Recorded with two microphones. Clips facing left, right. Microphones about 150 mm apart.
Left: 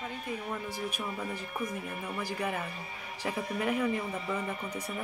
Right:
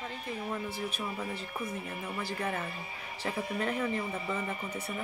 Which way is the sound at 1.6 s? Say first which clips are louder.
Left 3 dB; 5° right (ahead or behind).